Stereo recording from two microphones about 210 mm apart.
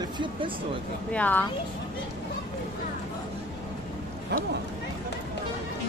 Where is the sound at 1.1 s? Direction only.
10° left (ahead or behind).